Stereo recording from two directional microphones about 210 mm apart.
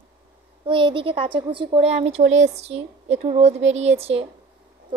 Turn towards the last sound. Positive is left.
turn(degrees=-30)  # may be behind; listen again after turning